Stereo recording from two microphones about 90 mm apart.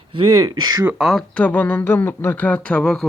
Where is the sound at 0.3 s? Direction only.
45° right (ahead or behind).